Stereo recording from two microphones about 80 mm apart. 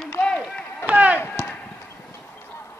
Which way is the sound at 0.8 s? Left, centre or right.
Right.